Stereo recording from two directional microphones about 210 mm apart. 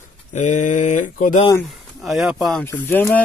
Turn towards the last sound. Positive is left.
turn(degrees=10)  # may be behind; listen again after turning